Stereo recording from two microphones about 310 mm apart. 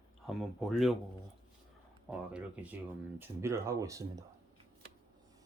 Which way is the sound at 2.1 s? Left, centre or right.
Centre.